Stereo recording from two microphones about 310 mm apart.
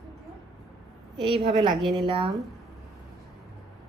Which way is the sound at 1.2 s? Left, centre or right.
Centre.